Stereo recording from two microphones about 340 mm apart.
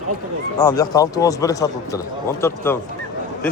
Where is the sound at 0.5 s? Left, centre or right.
Centre.